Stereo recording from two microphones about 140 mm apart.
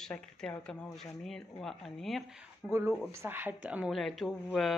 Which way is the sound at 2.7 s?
15° right (ahead or behind).